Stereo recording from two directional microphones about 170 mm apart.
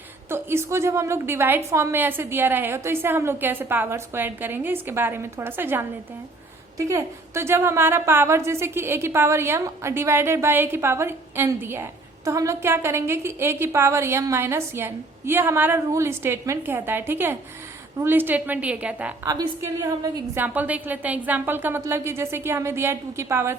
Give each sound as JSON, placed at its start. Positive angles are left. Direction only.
{"t": 0.3, "sound": "a woman's voice", "side_deg": -15}
{"t": 19.3, "sound": "a woman's voice", "side_deg": -25}
{"t": 20.3, "sound": "a woman's voice", "side_deg": -10}